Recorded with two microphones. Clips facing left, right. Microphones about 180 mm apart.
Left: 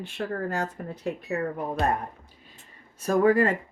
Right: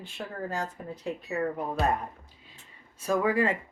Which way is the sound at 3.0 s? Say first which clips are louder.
Left 5 dB; 45° left (ahead or behind).